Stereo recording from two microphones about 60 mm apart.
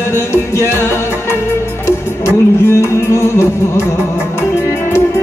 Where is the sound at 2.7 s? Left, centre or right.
Left.